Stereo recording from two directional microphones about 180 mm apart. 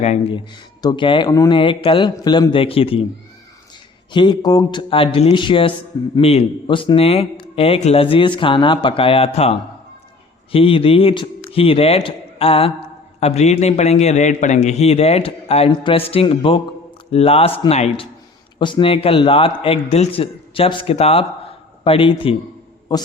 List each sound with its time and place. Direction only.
0.0 s a man's voice: 40° left (ahead or behind)
0.5 s speech: 25° left (ahead or behind)
4.1 s a man's voice: 25° left (ahead or behind)